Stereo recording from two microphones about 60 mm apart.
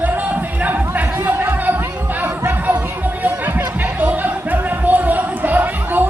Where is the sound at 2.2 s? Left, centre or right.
Right.